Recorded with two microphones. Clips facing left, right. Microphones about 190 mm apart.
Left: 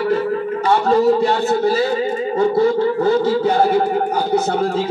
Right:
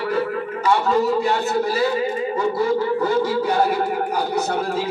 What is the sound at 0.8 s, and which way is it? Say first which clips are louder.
Speech: left 5 dB; 30° left (ahead or behind).